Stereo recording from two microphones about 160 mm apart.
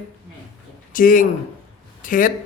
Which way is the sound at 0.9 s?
60° left (ahead or behind).